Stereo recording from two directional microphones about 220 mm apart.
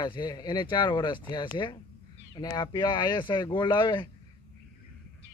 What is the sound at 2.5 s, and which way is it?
Speech, 20° left (ahead or behind).